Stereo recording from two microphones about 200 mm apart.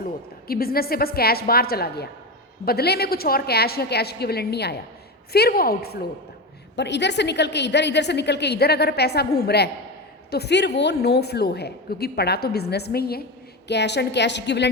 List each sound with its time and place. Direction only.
0.4 s a woman's voice: 50° left (ahead or behind)